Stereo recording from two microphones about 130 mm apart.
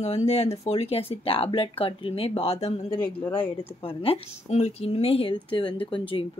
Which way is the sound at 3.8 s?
45° left (ahead or behind).